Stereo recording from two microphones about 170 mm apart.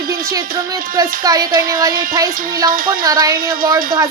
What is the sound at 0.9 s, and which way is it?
Speech, 20° right (ahead or behind).